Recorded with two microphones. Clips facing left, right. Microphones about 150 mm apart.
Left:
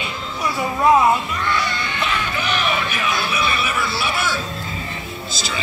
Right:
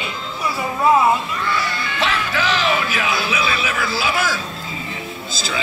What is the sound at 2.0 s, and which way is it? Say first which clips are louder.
Music: right 4 dB; 90° right.